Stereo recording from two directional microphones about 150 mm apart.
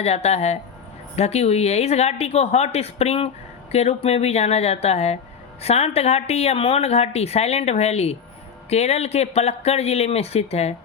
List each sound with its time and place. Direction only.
0.0 s a woman's voice: 45° left (ahead or behind)